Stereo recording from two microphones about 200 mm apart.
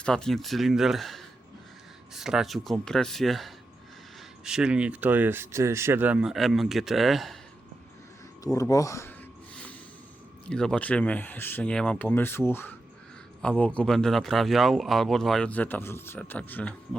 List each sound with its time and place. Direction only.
0.0 s speech: 5° left (ahead or behind)
8.5 s speech: 15° left (ahead or behind)
10.5 s speech: 5° left (ahead or behind)